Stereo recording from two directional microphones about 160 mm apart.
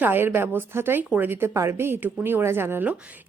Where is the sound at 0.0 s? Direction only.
10° right (ahead or behind).